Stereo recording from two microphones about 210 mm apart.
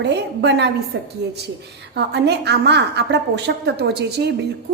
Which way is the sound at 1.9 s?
55° right (ahead or behind).